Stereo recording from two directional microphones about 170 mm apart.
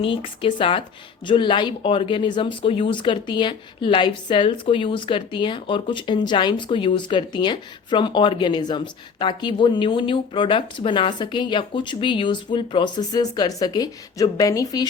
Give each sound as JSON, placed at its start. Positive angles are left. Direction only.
{"t": 0.0, "sound": "speech", "side_deg": 30}